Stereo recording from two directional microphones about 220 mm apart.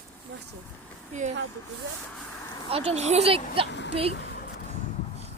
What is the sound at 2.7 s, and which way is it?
Speech, 25° right (ahead or behind).